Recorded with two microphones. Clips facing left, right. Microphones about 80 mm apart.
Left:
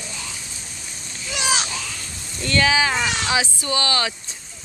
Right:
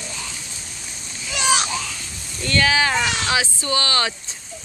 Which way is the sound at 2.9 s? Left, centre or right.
Centre.